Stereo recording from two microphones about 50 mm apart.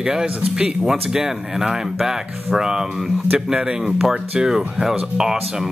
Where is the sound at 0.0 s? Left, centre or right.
Centre.